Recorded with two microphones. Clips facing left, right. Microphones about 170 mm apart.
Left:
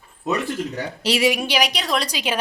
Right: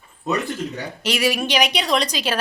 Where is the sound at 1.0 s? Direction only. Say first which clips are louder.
Left 2 dB; 30° left (ahead or behind).